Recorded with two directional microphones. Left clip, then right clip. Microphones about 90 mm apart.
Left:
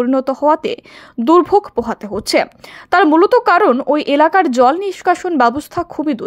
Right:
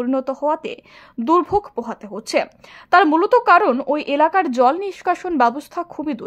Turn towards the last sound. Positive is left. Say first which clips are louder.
# left 6 dB
turn(degrees=35)  # may be behind; listen again after turning